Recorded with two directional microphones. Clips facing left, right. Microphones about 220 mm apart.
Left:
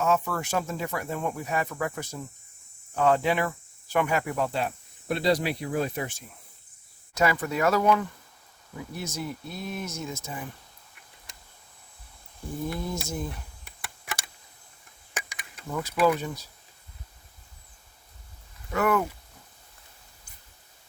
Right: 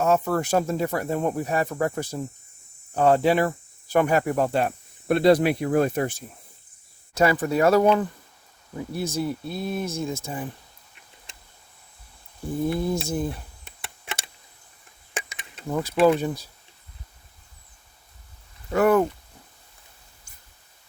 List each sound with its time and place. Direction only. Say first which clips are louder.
0.0 s speech: right 5 dB; 40° right (ahead or behind)
7.1 s speech: right 5 dB; 30° right (ahead or behind)
12.7 s speech: right 7 dB; 30° right (ahead or behind)
13.7 s a sound: right 1 dB; 25° right (ahead or behind)
18.7 s speech: right 6 dB; 35° right (ahead or behind)